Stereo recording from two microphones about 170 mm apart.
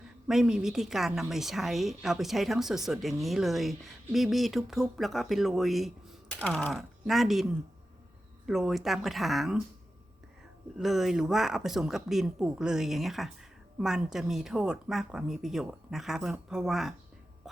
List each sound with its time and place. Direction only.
0.3 s a woman's voice: 5° right (ahead or behind)
8.4 s a woman's voice: centre (ahead or behind)
10.8 s a woman's voice: centre (ahead or behind)